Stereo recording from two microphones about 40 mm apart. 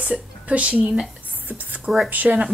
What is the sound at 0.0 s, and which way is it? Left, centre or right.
Speech, right.